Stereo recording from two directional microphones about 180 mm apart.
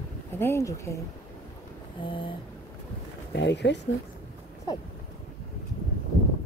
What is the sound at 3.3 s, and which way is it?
Speech, 75° left (ahead or behind).